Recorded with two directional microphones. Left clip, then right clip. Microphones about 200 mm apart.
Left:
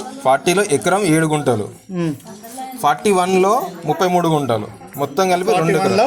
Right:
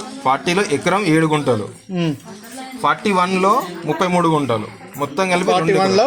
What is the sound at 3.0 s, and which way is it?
A man's voice, 60° left (ahead or behind).